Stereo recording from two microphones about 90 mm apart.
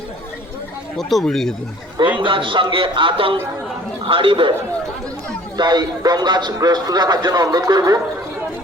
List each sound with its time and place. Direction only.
0.9 s speech: 5° left (ahead or behind)
2.0 s a man's voice: 65° right (ahead or behind)
5.5 s a man's voice: 50° right (ahead or behind)